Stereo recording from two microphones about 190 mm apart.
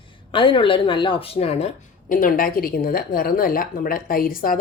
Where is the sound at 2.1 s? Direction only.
50° left (ahead or behind).